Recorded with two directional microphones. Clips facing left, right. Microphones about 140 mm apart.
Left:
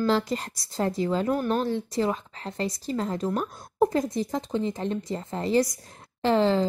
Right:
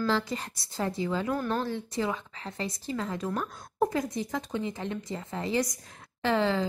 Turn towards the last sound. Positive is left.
turn(degrees=35)  # may be behind; listen again after turning